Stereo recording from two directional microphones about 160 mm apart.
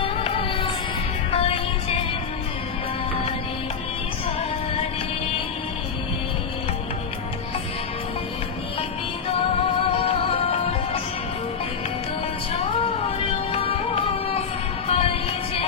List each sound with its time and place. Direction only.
0.0 s child singing: 35° left (ahead or behind)
1.3 s music: 35° left (ahead or behind)
9.3 s music: 35° left (ahead or behind)
12.7 s music: 35° left (ahead or behind)